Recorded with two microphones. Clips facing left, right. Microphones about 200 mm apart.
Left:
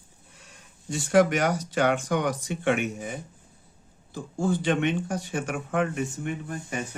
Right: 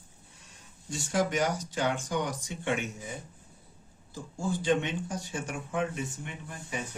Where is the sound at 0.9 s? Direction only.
70° left (ahead or behind).